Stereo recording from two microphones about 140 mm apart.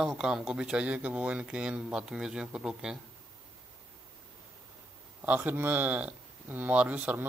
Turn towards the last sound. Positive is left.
turn(degrees=-10)  # may be behind; listen again after turning